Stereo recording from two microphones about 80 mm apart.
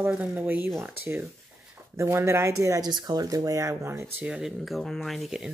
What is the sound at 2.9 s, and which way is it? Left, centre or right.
Speech, right.